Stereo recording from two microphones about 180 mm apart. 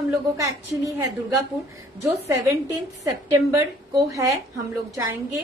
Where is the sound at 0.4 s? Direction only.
15° right (ahead or behind).